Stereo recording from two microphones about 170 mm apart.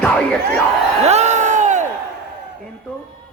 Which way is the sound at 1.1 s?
40° right (ahead or behind).